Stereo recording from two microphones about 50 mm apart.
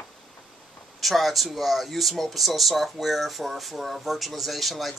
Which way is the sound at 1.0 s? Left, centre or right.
Centre.